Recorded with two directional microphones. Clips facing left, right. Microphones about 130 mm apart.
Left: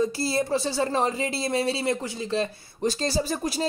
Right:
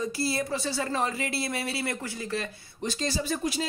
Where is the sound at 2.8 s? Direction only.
40° left (ahead or behind).